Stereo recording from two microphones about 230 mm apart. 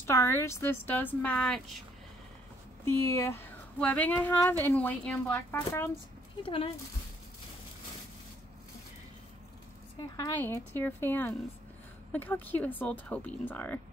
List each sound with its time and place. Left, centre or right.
0.0 s speech: centre
2.8 s speech: centre
6.4 s a woman's voice: left
10.1 s speech: centre